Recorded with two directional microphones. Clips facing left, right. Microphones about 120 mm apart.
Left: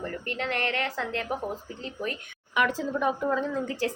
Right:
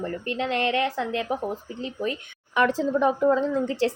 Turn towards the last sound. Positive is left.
turn(degrees=-30)  # may be behind; listen again after turning